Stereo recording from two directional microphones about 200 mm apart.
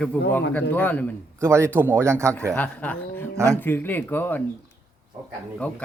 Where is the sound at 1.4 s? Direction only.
15° right (ahead or behind).